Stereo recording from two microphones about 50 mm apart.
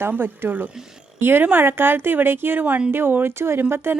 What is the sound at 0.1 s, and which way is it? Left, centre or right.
A woman's voice, right.